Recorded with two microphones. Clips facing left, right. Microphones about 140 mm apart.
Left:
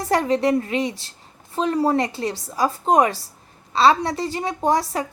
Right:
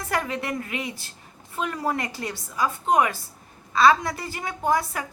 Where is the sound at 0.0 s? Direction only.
35° left (ahead or behind).